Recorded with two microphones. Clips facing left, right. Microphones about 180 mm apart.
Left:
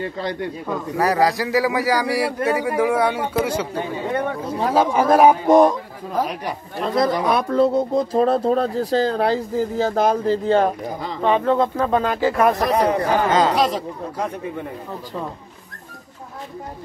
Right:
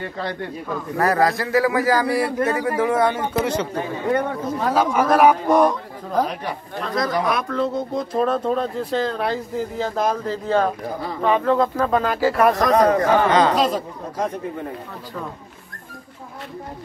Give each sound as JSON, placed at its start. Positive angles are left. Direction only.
{"t": 0.0, "sound": "a man's voice", "side_deg": 20}
{"t": 4.6, "sound": "a man's voice", "side_deg": 30}
{"t": 6.8, "sound": "a man's voice", "side_deg": 25}
{"t": 12.6, "sound": "speech", "side_deg": 30}